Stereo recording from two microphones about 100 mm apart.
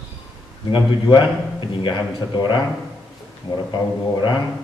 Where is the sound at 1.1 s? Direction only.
50° left (ahead or behind).